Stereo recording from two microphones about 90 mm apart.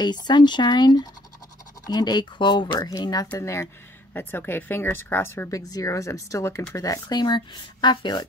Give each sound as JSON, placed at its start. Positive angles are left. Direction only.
{"t": 0.0, "sound": "speech", "side_deg": 55}
{"t": 2.9, "sound": "speech", "side_deg": 45}
{"t": 3.3, "sound": "speech", "side_deg": 35}
{"t": 5.5, "sound": "speech", "side_deg": 40}